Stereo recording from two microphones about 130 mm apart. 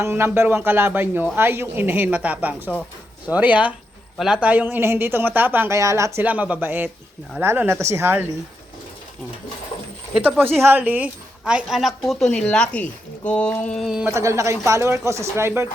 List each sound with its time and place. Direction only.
0.0 s speech: 20° right (ahead or behind)
10.2 s a woman's voice: 15° right (ahead or behind); by 14.0 s 5° left (ahead or behind)
14.0 s speech: 25° right (ahead or behind)